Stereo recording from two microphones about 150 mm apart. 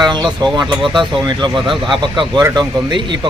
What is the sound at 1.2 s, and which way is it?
Speech, 30° right (ahead or behind).